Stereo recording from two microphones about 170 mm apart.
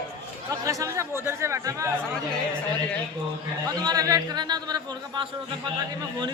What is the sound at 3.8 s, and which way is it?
A man's voice, 20° right (ahead or behind).